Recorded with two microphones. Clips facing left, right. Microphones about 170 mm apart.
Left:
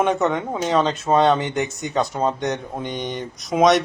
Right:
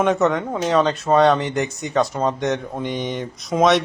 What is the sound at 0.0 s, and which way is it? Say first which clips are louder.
Speech: right 2 dB; centre (ahead or behind).